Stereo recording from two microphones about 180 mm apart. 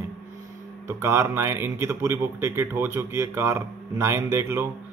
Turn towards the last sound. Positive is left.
turn(degrees=-15)  # may be behind; listen again after turning